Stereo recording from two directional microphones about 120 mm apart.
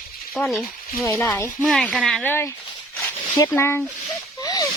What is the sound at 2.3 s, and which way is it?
Speech, 20° left (ahead or behind).